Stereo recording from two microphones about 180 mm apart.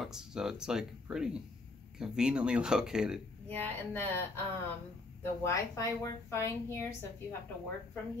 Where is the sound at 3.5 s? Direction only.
10° left (ahead or behind).